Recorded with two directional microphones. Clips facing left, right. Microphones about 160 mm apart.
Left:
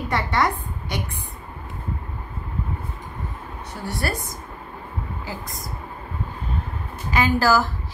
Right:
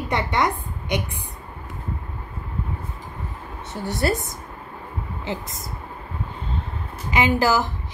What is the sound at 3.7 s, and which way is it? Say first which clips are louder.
A woman's voice: right 5 dB; 20° right (ahead or behind).